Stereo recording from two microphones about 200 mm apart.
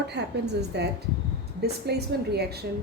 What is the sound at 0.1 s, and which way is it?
A woman's voice, 55° right (ahead or behind).